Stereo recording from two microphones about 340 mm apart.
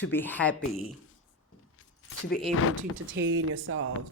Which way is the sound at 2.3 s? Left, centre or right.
Centre.